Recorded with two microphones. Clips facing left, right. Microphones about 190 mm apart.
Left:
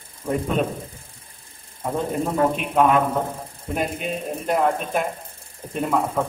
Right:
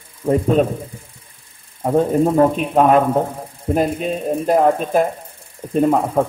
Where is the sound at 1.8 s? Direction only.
40° right (ahead or behind).